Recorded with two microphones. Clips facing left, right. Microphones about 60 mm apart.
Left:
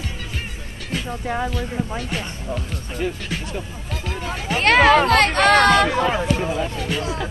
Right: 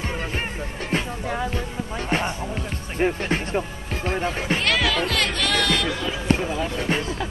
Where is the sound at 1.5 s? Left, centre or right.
Right.